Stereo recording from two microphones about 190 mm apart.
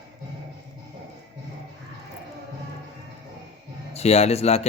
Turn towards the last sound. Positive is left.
turn(degrees=35)  # may be behind; listen again after turning